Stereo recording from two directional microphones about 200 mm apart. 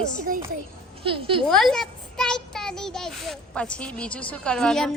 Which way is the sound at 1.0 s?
25° right (ahead or behind).